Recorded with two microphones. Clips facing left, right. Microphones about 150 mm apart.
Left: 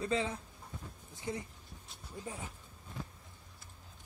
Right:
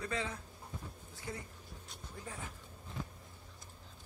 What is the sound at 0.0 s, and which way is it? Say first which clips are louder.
Speech: left 5 dB; 25° left (ahead or behind).